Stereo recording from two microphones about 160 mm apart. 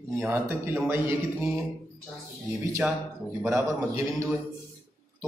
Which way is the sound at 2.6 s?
15° right (ahead or behind).